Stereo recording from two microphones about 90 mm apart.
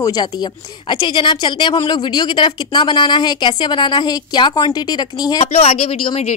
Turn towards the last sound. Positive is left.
turn(degrees=85)